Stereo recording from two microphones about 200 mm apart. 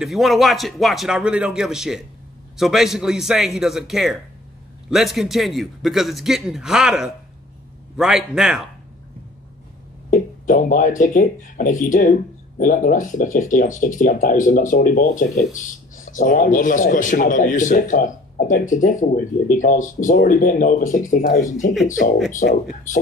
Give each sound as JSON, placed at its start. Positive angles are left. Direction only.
{"t": 0.0, "sound": "a man's voice", "side_deg": 0}
{"t": 10.1, "sound": "a man's voice", "side_deg": 40}